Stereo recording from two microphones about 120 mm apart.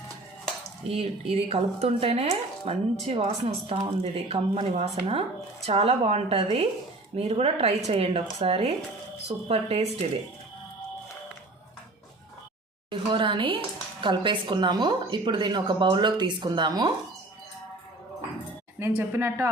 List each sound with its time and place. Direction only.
0.9 s speech: 55° right (ahead or behind)
4.3 s speech: 60° right (ahead or behind)
12.9 s a woman's voice: 45° right (ahead or behind)
18.8 s speech: 20° right (ahead or behind)